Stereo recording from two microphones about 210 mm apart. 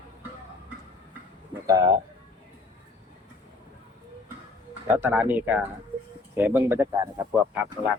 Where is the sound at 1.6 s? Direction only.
15° right (ahead or behind).